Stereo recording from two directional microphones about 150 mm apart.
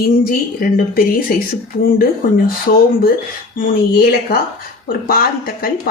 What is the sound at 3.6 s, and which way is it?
Speech, 90° left.